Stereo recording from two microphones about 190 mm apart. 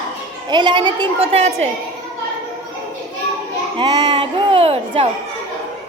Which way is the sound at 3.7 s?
20° right (ahead or behind).